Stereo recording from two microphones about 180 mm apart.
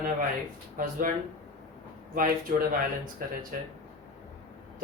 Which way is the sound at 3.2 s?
50° right (ahead or behind).